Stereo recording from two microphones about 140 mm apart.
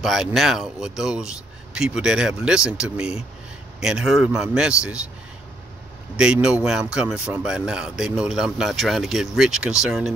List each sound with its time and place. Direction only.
0.0 s speech: centre (ahead or behind)
6.1 s speech: 5° right (ahead or behind)